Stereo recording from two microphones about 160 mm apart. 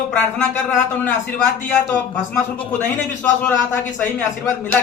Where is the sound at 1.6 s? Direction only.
10° left (ahead or behind).